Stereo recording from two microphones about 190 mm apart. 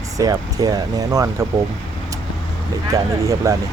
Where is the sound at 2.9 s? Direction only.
15° right (ahead or behind).